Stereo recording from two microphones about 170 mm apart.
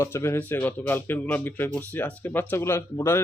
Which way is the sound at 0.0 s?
15° left (ahead or behind).